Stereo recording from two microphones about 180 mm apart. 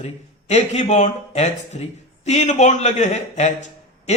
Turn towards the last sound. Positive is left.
turn(degrees=40)  # may be behind; listen again after turning